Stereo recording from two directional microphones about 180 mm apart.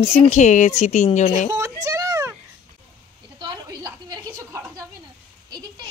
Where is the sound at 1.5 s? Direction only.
15° right (ahead or behind).